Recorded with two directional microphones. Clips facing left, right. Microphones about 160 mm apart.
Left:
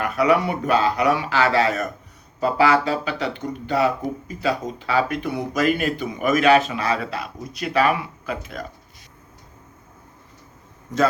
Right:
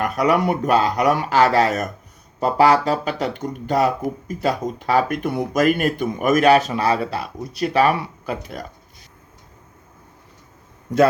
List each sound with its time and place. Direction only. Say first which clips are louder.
0.0 s speech: right 1 dB; 45° right (ahead or behind)